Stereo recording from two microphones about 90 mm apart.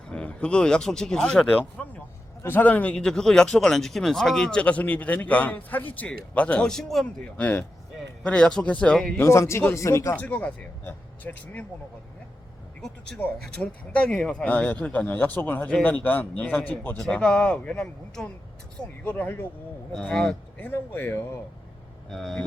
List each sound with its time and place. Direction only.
0.1 s speech: 10° left (ahead or behind)
1.8 s vehicle: 15° left (ahead or behind)
2.4 s speech: 20° left (ahead or behind); by 7.1 s 5° left (ahead or behind)
7.3 s speech: 15° left (ahead or behind)
9.1 s speech: 30° left (ahead or behind)
10.2 s speech: 15° left (ahead or behind)
13.4 s speech: 15° left (ahead or behind)
19.0 s speech: 20° left (ahead or behind)
20.6 s speech: 20° left (ahead or behind)
22.1 s speech: 5° left (ahead or behind)